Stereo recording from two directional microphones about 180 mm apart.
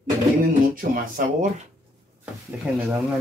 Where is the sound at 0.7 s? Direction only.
50° right (ahead or behind).